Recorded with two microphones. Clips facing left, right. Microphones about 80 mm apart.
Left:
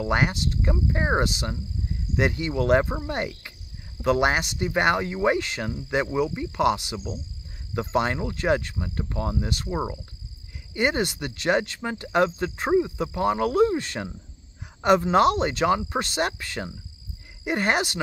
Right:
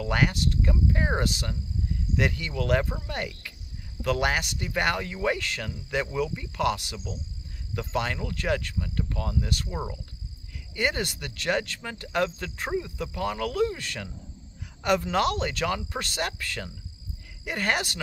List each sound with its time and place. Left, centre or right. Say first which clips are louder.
0.0 s speech: left 2 dB; left